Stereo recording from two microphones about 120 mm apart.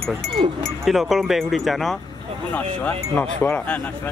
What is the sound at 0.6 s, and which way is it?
Speech, centre (ahead or behind).